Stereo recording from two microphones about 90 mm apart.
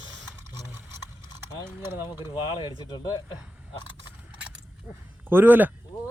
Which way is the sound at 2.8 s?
50° left (ahead or behind).